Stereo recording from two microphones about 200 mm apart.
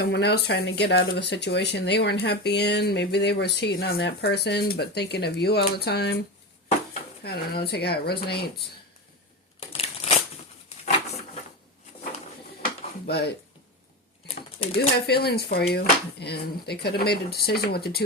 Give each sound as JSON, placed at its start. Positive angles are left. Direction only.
{"t": 0.0, "sound": "speech", "side_deg": 55}
{"t": 7.3, "sound": "speech", "side_deg": 50}
{"t": 9.6, "sound": "crushing", "side_deg": 30}
{"t": 13.1, "sound": "speech", "side_deg": 50}
{"t": 14.8, "sound": "speech", "side_deg": 50}